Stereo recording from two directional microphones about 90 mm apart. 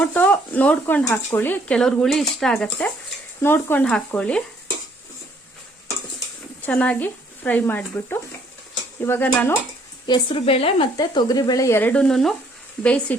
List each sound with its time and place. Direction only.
0.0 s speech: 15° left (ahead or behind); by 2.6 s centre (ahead or behind)
2.6 s speech: 15° left (ahead or behind)
3.4 s speech: 25° left (ahead or behind)
4.1 s speech: 10° left (ahead or behind)
6.7 s speech: 15° left (ahead or behind)
10.1 s speech: 75° left (ahead or behind); by 10.8 s 90° left
10.9 s speech: 45° left (ahead or behind)
11.7 s speech: 20° left (ahead or behind)
12.0 s frying: 5° left (ahead or behind)
12.8 s speech: 15° left (ahead or behind)